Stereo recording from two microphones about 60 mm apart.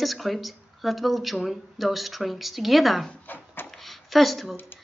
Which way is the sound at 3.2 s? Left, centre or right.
Left.